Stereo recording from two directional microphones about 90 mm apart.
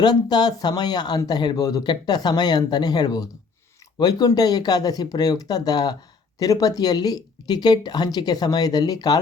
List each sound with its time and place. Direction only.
0.0 s speech: 50° left (ahead or behind)